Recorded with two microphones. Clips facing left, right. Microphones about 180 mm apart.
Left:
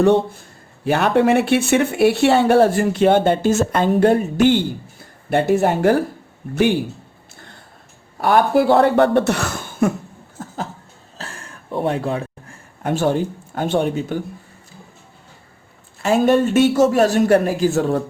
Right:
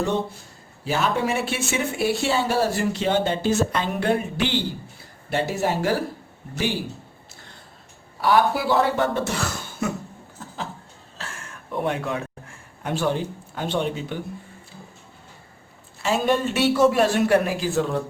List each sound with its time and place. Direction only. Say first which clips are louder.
0.9 s a man's voice: left 8 dB; 65° left (ahead or behind)
8.2 s a man's voice: left 5 dB; 50° left (ahead or behind)
10.3 s a sound: left 6 dB; 45° left (ahead or behind)
11.2 s a sound: left 3 dB; 35° left (ahead or behind)
12.8 s a man's voice: left 6 dB; 45° left (ahead or behind)
16.0 s a man's voice: left 7 dB; 50° left (ahead or behind)